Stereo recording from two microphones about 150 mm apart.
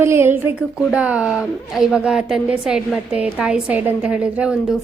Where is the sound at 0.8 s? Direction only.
5° right (ahead or behind).